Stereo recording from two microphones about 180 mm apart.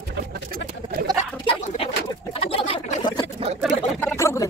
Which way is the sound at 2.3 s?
30° left (ahead or behind).